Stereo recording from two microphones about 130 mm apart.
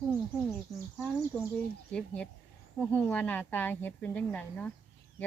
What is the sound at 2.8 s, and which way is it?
Speech, 10° left (ahead or behind).